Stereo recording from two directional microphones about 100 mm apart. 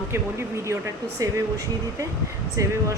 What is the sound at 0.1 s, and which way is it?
Speech, 30° right (ahead or behind).